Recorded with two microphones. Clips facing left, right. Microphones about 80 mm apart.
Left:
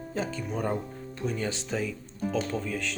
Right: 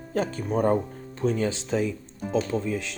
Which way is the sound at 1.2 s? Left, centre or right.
Right.